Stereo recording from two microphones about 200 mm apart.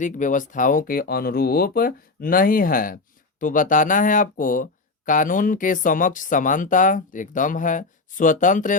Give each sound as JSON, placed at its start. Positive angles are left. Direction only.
{"t": 0.0, "sound": "speech", "side_deg": 40}